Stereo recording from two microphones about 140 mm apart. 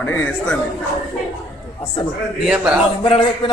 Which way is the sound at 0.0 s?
10° left (ahead or behind).